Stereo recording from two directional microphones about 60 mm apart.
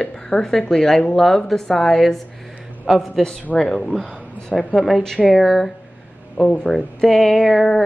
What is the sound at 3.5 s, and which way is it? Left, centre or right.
A woman's voice, centre.